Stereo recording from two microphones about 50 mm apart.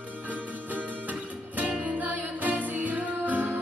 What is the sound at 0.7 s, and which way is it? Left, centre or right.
Music, right.